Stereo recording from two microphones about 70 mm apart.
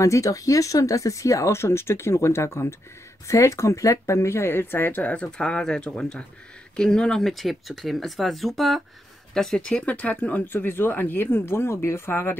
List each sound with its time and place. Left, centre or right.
0.0 s speech: left